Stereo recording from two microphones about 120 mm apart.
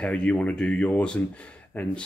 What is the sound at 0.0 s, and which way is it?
Speech, 10° left (ahead or behind).